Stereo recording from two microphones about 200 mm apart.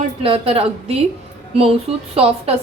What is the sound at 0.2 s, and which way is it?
Speech, 30° right (ahead or behind).